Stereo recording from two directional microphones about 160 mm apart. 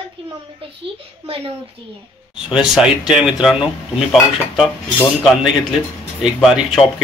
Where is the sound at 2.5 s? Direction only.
5° right (ahead or behind).